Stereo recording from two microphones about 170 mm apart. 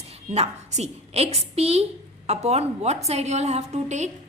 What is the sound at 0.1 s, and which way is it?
A woman's voice, 40° right (ahead or behind).